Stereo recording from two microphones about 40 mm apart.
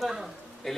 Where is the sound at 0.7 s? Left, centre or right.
Centre.